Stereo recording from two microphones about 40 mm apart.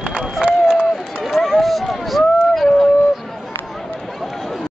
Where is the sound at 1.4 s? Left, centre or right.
Centre.